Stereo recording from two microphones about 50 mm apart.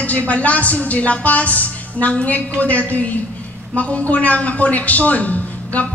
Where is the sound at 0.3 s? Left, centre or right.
Left.